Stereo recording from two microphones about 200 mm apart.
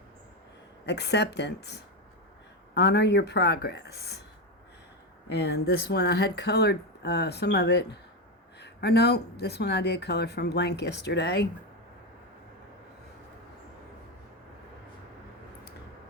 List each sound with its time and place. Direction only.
0.9 s speech: 55° left (ahead or behind)
5.3 s speech: 55° left (ahead or behind)